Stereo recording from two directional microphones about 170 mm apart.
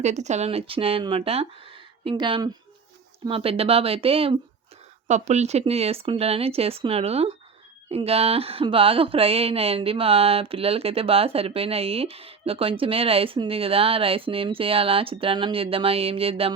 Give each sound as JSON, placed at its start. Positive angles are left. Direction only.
{"t": 0.0, "sound": "speech", "side_deg": -40}